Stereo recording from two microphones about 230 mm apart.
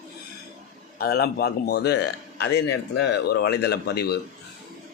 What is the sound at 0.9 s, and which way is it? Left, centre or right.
Speech, left.